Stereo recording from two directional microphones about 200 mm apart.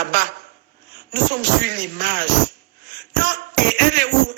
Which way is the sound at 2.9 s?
40° right (ahead or behind).